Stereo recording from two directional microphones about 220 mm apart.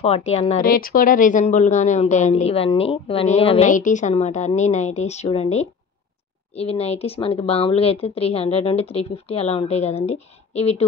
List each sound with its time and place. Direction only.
0.0 s a woman's voice: 25° left (ahead or behind)
0.7 s a woman's voice: 40° left (ahead or behind)